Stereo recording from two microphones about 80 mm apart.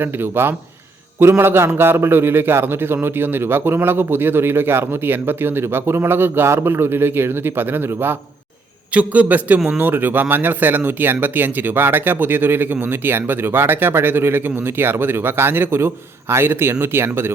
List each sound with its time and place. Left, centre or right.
0.0 s a man's voice: right